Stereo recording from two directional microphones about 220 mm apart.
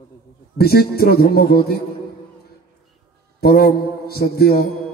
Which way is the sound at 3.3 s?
45° left (ahead or behind).